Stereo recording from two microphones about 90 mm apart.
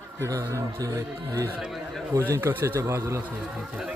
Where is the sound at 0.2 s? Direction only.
40° right (ahead or behind).